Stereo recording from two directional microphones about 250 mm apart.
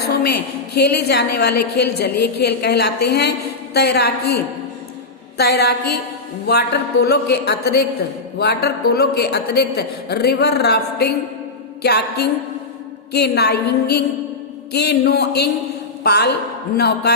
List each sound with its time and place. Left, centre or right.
0.1 s a man's voice: left